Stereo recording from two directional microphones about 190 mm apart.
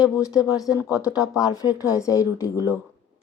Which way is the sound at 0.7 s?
5° right (ahead or behind).